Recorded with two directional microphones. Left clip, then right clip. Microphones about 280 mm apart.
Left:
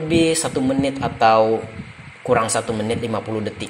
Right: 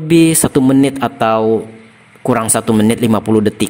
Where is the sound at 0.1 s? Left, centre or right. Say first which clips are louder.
Right 8 dB; right.